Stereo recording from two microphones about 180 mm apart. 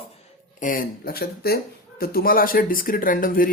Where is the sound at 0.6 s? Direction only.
50° left (ahead or behind).